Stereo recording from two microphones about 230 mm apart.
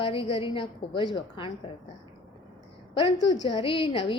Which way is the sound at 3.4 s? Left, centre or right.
Left.